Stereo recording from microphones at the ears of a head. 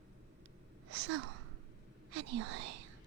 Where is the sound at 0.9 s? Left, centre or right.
Right.